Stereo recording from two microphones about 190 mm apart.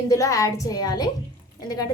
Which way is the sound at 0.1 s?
15° left (ahead or behind).